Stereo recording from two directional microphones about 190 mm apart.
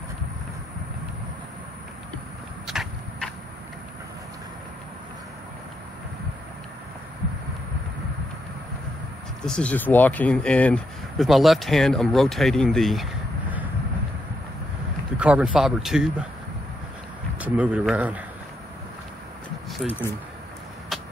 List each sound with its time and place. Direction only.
2.6 s a sound: centre (ahead or behind)
9.5 s speech: 5° left (ahead or behind)
15.1 s speech: 5° right (ahead or behind)
17.4 s speech: 5° right (ahead or behind)
19.7 s speech: centre (ahead or behind)
20.9 s vehicle: centre (ahead or behind)